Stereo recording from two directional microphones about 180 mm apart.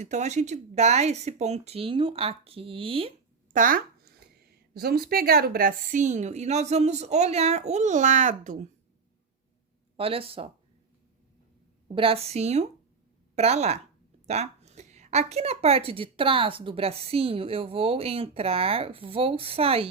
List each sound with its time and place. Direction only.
0.0 s a woman's voice: 40° right (ahead or behind)
3.5 s a sound: 50° right (ahead or behind)
4.7 s a woman's voice: 55° right (ahead or behind); by 8.7 s 40° right (ahead or behind)
10.0 s a woman's voice: 30° right (ahead or behind)
11.9 s a woman's voice: 30° right (ahead or behind)